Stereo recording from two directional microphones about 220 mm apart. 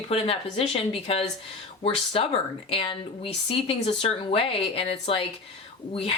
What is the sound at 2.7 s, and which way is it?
Speech, 25° left (ahead or behind).